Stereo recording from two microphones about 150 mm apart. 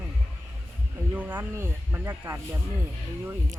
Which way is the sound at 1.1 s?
15° right (ahead or behind).